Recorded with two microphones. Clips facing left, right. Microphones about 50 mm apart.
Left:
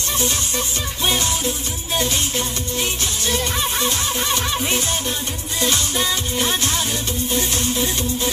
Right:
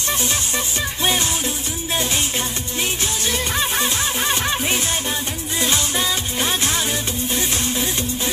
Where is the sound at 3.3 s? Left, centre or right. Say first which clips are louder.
Even; right.